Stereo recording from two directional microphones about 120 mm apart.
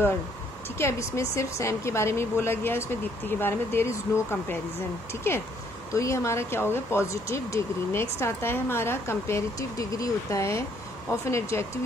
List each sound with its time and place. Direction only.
0.7 s speech: 25° left (ahead or behind)
5.9 s speech: 25° left (ahead or behind)